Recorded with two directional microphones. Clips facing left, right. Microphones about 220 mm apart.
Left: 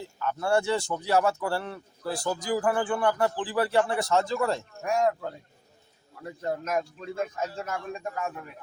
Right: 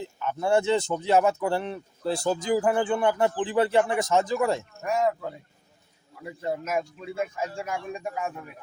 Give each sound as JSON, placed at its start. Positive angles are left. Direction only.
{"t": 0.0, "sound": "speech", "side_deg": -20}
{"t": 4.8, "sound": "a man's voice", "side_deg": 0}